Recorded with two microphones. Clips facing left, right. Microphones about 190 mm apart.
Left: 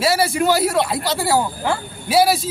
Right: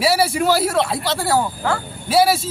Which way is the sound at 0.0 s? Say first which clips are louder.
Even; 10° right (ahead or behind).